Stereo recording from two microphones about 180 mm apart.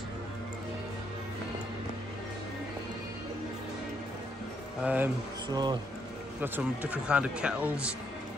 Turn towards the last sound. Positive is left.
turn(degrees=-5)  # may be behind; listen again after turning